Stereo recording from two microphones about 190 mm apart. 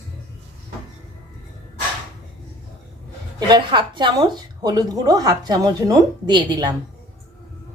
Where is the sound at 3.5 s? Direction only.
25° right (ahead or behind).